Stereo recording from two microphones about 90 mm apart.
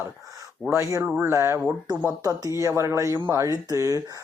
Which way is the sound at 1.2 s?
30° right (ahead or behind).